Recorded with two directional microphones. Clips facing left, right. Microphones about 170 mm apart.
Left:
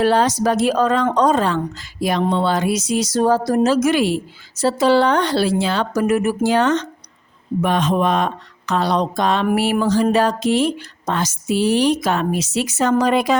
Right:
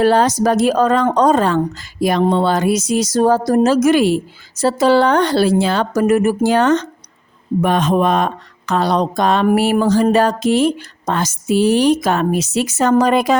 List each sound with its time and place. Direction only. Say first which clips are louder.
0.0 s a woman's voice: right 3 dB; 45° right (ahead or behind)